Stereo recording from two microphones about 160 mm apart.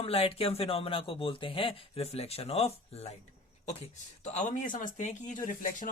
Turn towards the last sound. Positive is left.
turn(degrees=55)  # may be behind; listen again after turning